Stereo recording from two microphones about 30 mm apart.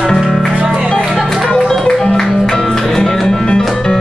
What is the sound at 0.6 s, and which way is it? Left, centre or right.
Music, right.